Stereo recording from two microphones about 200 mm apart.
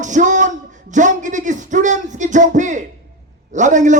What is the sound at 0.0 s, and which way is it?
A man's voice, 40° right (ahead or behind).